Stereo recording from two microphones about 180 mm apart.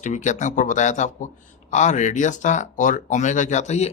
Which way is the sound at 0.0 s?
40° left (ahead or behind).